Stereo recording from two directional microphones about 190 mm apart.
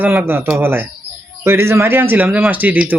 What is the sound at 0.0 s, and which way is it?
Speech, 10° right (ahead or behind).